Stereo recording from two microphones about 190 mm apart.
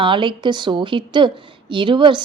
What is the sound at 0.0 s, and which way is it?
Speech, 25° right (ahead or behind).